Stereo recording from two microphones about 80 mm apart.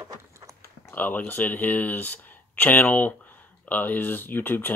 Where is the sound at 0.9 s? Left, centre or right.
Left.